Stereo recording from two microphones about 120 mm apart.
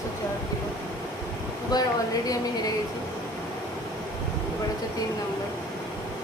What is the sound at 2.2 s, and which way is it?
Speech, 30° left (ahead or behind).